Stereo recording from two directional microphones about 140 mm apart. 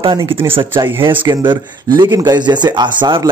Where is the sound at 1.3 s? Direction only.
30° right (ahead or behind).